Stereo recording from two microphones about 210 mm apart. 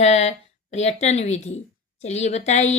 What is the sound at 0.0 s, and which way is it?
A woman's voice, 30° left (ahead or behind).